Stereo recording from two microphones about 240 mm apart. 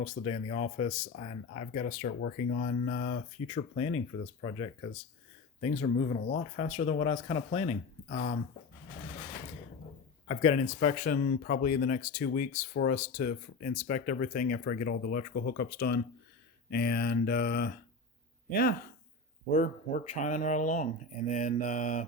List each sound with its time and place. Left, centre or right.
0.0 s speech: left
10.2 s speech: left
19.5 s speech: left